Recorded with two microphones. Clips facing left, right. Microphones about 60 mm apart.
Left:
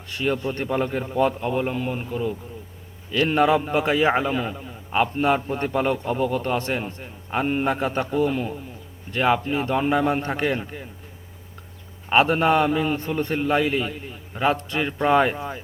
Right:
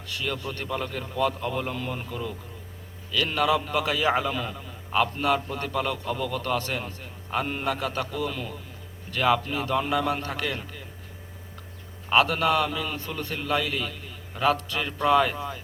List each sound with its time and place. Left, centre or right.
0.1 s a man's voice: left
12.0 s a man's voice: left